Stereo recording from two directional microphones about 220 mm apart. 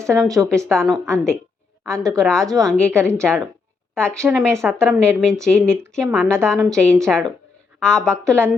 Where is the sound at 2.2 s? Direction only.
Centre (ahead or behind).